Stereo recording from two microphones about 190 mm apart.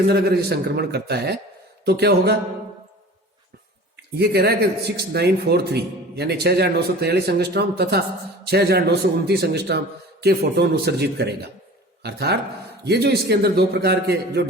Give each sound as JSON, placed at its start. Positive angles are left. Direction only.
{"t": 0.1, "sound": "speech", "side_deg": -55}
{"t": 3.9, "sound": "speech", "side_deg": -60}